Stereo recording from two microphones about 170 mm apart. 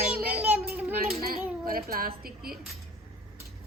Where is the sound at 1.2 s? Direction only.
60° right (ahead or behind).